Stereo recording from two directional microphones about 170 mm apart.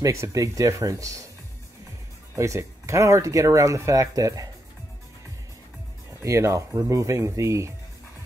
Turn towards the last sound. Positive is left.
turn(degrees=-15)  # may be behind; listen again after turning